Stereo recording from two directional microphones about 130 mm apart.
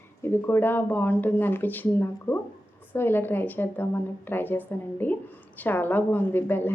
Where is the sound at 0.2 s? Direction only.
15° left (ahead or behind).